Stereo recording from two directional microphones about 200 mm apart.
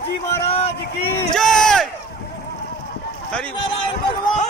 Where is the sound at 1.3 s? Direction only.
5° left (ahead or behind).